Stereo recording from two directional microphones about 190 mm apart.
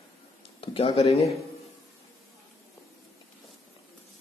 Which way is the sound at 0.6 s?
30° left (ahead or behind).